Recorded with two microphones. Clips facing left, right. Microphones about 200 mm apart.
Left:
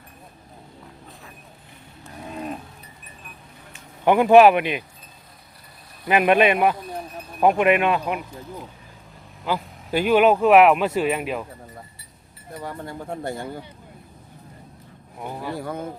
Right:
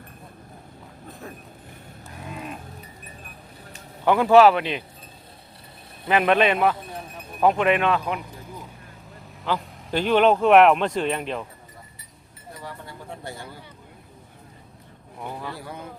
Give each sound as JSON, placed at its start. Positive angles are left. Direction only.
{"t": 2.3, "sound": "livestock", "side_deg": 35}
{"t": 4.0, "sound": "speech", "side_deg": 15}
{"t": 6.1, "sound": "speech", "side_deg": 10}
{"t": 9.4, "sound": "speech", "side_deg": 10}
{"t": 12.6, "sound": "speech", "side_deg": 50}
{"t": 15.2, "sound": "speech", "side_deg": 10}
{"t": 15.5, "sound": "speech", "side_deg": 50}